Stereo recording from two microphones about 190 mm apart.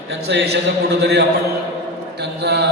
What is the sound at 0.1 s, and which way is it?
Speech, 60° right (ahead or behind).